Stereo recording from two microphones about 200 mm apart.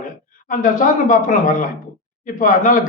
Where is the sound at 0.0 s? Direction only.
40° left (ahead or behind).